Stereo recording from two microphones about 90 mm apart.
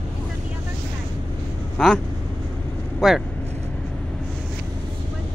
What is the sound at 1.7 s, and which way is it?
Speech, 5° left (ahead or behind).